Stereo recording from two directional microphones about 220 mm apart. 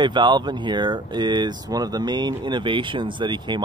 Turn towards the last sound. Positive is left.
turn(degrees=-20)  # may be behind; listen again after turning